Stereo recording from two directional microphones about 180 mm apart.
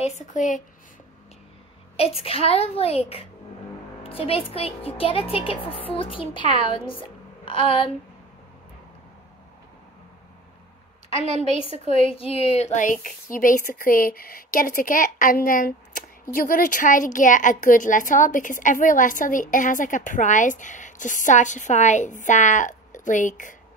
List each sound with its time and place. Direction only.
0.0 s speech: 45° left (ahead or behind)
2.0 s speech: 35° left (ahead or behind)
12.0 s speech: 30° left (ahead or behind)